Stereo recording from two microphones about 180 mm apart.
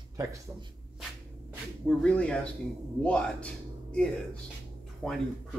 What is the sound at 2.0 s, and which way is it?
Speech, 5° left (ahead or behind).